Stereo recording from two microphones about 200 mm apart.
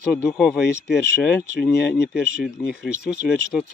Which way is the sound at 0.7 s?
55° left (ahead or behind).